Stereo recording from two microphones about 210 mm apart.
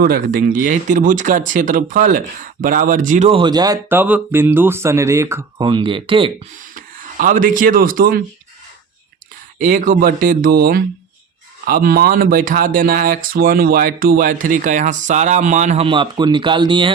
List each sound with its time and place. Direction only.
0.0 s speech: 45° right (ahead or behind); by 6.3 s 25° right (ahead or behind)
6.6 s speech: 40° right (ahead or behind)
9.6 s speech: 40° right (ahead or behind); by 16.9 s 25° right (ahead or behind)